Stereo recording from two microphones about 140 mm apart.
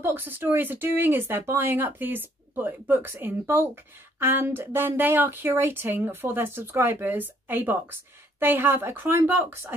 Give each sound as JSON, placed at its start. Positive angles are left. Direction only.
{"t": 0.0, "sound": "speech", "side_deg": -15}